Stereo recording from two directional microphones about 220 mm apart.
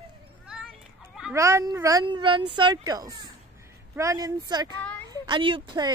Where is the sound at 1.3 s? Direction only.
15° right (ahead or behind).